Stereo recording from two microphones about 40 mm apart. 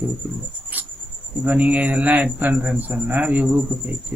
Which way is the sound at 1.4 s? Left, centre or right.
Right.